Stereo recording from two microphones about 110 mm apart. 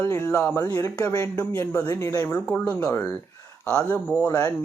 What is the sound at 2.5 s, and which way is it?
Speech, 15° left (ahead or behind).